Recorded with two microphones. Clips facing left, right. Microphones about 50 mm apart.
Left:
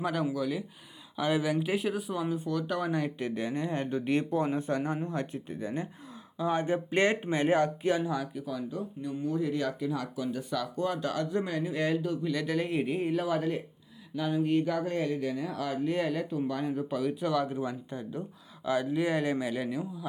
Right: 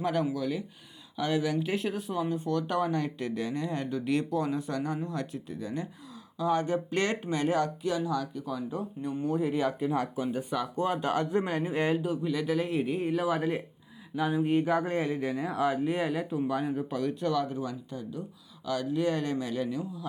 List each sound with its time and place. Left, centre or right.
0.0 s speech: centre
2.9 s speech: centre
8.1 s a man's voice: centre
8.7 s speech: right
9.4 s speech: centre
9.8 s speech: right
12.0 s speech: centre
17.1 s a man's voice: centre